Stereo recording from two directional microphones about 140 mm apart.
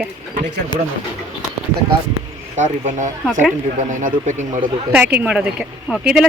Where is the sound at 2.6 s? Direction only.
60° right (ahead or behind).